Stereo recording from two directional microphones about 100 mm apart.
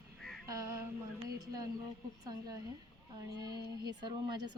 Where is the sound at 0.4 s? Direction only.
30° right (ahead or behind).